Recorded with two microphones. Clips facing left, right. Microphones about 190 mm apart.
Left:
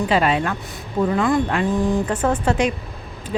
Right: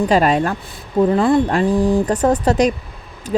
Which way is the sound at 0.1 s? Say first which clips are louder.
Right 4 dB; 40° right (ahead or behind).